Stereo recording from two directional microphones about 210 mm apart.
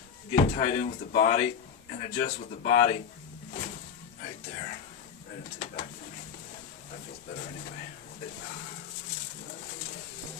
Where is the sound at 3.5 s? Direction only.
35° left (ahead or behind).